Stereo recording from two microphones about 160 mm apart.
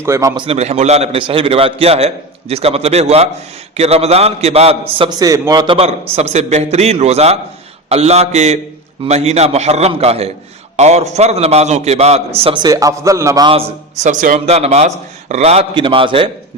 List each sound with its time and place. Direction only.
0.0 s a man's voice: 20° right (ahead or behind)
0.4 s a man's voice: 40° right (ahead or behind)
5.2 s a man's voice: 20° right (ahead or behind); by 12.2 s 40° right (ahead or behind)
12.6 s a man's voice: 20° right (ahead or behind)
13.5 s a man's voice: 40° right (ahead or behind)